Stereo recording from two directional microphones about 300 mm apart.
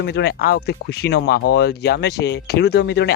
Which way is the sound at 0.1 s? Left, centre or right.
Left.